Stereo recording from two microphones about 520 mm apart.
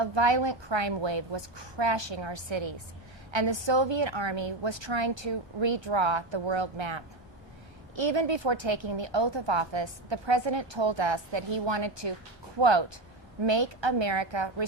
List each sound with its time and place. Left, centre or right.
0.0 s a woman's voice: right